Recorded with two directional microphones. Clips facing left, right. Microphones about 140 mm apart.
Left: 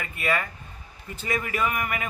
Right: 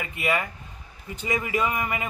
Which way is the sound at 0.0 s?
20° right (ahead or behind).